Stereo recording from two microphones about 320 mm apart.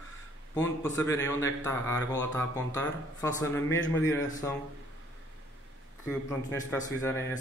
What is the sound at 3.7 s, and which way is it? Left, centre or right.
Speech, left.